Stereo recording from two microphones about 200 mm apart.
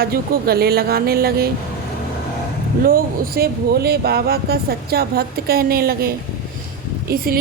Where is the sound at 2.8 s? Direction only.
50° right (ahead or behind).